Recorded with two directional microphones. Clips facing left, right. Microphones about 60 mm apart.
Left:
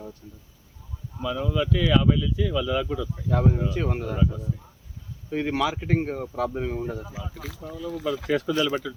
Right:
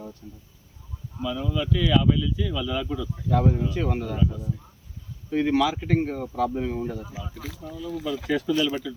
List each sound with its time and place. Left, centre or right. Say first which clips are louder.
1.2 s speech: left 2 dB; left
5.3 s speech: right 3 dB; centre
7.9 s speech: left 1 dB; left